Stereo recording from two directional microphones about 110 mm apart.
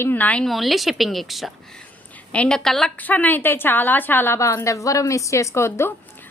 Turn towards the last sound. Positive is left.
turn(degrees=25)  # may be behind; listen again after turning